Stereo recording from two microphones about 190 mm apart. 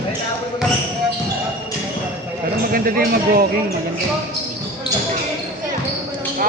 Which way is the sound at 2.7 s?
50° right (ahead or behind).